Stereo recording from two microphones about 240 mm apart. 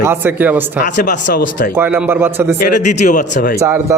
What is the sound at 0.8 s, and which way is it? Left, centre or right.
Speech, left.